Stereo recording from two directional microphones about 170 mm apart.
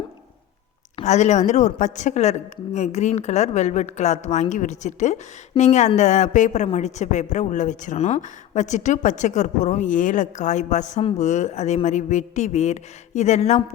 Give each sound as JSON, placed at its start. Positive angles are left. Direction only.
{"t": 1.0, "sound": "a woman's voice", "side_deg": 45}